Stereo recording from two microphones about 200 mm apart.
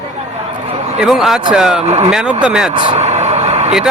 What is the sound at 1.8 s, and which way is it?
Speech, 30° right (ahead or behind).